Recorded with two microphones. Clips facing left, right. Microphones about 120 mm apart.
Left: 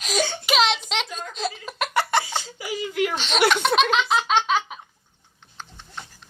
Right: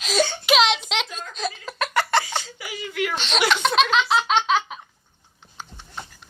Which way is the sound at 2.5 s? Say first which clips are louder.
Left 4 dB; 30° left (ahead or behind).